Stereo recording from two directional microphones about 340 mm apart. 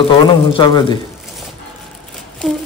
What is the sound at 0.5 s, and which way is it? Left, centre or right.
Speech, centre.